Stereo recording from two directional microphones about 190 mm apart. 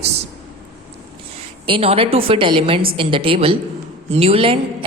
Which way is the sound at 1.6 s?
30° right (ahead or behind).